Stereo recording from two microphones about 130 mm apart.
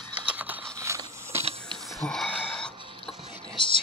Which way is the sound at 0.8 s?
20° right (ahead or behind).